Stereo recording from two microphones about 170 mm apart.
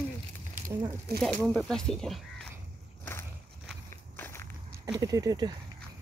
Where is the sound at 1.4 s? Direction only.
Centre (ahead or behind).